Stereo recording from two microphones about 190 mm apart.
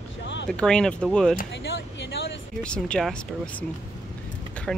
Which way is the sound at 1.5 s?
70° left (ahead or behind).